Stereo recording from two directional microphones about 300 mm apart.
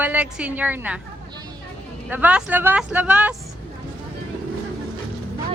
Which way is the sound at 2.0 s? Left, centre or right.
Centre.